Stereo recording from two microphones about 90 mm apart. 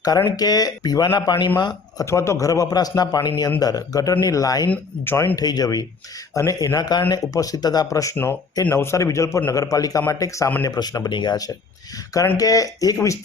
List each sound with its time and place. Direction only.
0.3 s speech: 45° left (ahead or behind)
2.0 s speech: 30° left (ahead or behind)
4.7 s speech: 25° left (ahead or behind)
5.4 s speech: 45° left (ahead or behind)
8.1 s speech: 25° left (ahead or behind); by 13.1 s 40° left (ahead or behind)